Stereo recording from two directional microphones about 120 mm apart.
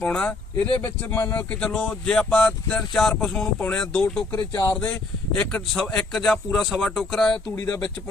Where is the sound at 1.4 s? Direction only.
10° left (ahead or behind).